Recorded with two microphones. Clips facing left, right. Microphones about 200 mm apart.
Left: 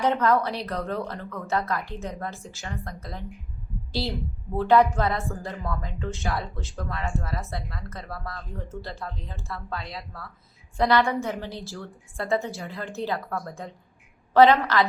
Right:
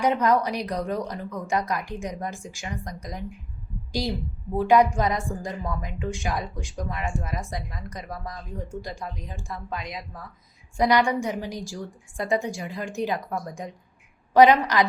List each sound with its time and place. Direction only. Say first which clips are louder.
0.0 s speech: right 1 dB; 15° right (ahead or behind)
4.5 s speech: right 1 dB; 10° right (ahead or behind)